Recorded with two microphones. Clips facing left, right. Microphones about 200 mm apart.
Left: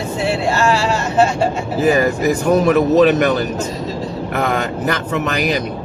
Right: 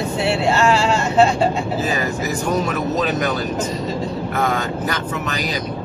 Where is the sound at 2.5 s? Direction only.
65° left (ahead or behind).